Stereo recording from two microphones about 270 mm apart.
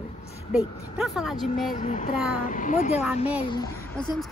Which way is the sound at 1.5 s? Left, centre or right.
Left.